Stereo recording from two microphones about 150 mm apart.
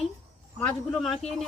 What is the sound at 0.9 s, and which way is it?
Speech, centre (ahead or behind).